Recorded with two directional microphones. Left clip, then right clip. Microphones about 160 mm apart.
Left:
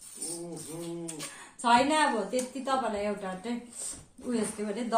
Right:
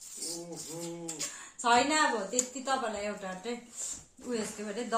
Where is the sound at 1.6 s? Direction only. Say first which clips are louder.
Left 2 dB; 25° left (ahead or behind).